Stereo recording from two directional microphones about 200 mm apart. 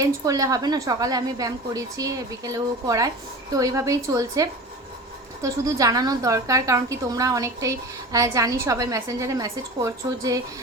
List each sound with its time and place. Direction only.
0.0 s a woman's voice: 15° right (ahead or behind)